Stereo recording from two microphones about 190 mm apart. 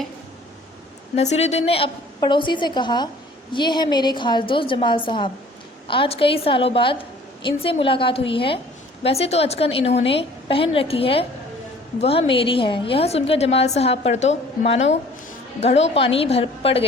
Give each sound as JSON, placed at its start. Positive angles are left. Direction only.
{"t": 1.1, "sound": "a woman's voice", "side_deg": 35}